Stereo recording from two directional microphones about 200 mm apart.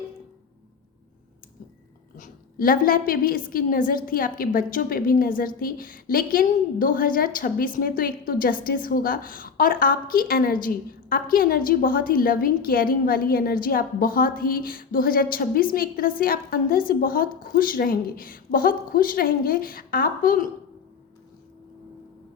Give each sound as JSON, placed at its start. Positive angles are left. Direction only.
{"t": 2.1, "sound": "a woman's voice", "side_deg": 45}